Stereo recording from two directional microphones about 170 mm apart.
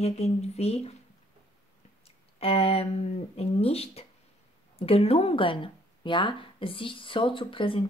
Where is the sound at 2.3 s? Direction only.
35° left (ahead or behind).